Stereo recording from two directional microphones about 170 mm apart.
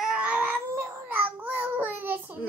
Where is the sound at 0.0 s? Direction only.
5° right (ahead or behind).